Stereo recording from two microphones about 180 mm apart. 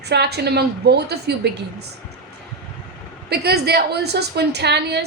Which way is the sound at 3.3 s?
65° right (ahead or behind).